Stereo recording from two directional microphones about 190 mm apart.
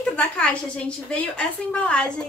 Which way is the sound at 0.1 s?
5° left (ahead or behind).